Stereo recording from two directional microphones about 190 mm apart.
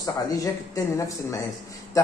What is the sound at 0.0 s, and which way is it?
A man's voice, 20° left (ahead or behind).